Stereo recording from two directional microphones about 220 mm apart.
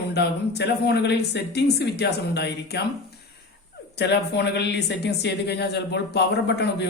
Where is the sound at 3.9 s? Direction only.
50° left (ahead or behind).